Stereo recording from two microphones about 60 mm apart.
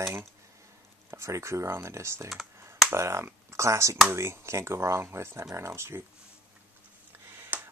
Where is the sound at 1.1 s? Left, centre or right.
Right.